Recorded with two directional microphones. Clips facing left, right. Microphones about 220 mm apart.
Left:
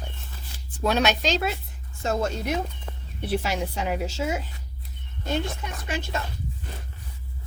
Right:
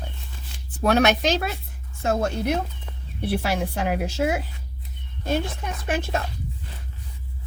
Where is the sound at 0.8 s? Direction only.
60° right (ahead or behind).